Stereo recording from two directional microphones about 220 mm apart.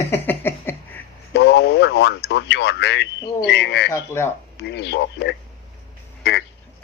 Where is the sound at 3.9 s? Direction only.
10° left (ahead or behind).